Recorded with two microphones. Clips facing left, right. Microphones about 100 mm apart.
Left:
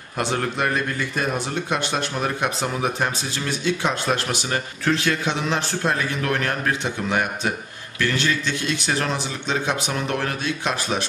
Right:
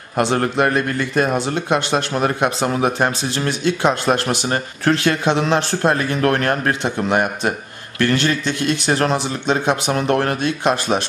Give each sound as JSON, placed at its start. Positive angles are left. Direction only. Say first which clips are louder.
{"t": 0.2, "sound": "a man's voice", "louder": "right 6 dB", "side_deg": -60}